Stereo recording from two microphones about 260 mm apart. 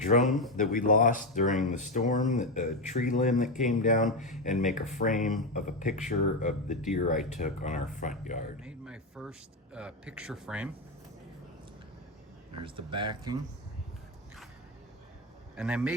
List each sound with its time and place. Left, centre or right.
0.2 s speech: centre
0.5 s speech: left
4.0 s speech: centre
4.4 s speech: left
8.5 s a sound: centre
9.7 s speech: centre
12.6 s speech: centre
15.5 s speech: centre